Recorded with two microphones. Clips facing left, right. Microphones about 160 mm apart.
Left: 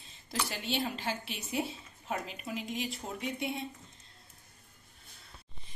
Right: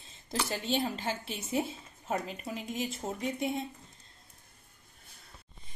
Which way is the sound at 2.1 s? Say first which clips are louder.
Right 2 dB; 35° right (ahead or behind).